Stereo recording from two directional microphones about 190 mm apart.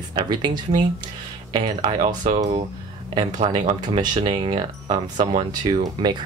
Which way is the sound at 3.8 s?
20° right (ahead or behind).